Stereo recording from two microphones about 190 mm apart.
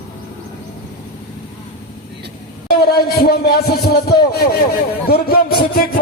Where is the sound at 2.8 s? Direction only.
55° left (ahead or behind).